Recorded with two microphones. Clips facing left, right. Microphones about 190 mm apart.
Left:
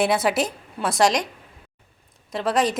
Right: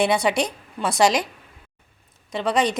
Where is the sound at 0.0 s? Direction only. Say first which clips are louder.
Even; centre (ahead or behind).